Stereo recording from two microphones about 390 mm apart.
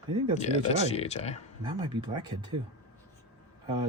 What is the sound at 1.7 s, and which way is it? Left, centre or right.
Speech, centre.